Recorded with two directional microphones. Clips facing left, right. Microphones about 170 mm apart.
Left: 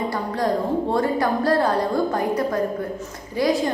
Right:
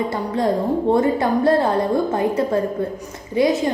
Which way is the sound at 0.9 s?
20° right (ahead or behind).